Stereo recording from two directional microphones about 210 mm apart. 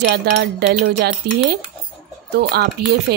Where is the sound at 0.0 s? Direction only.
50° right (ahead or behind).